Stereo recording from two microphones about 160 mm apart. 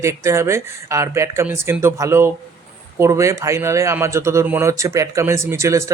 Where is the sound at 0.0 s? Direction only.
15° right (ahead or behind).